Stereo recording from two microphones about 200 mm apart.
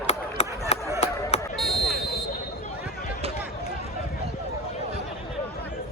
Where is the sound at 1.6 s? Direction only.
Centre (ahead or behind).